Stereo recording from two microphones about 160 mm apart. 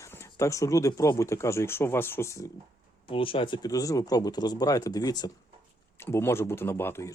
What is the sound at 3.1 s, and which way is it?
Speech, 35° left (ahead or behind).